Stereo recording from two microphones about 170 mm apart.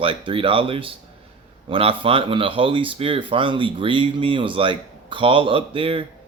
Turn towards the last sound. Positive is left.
turn(degrees=-30)  # may be behind; listen again after turning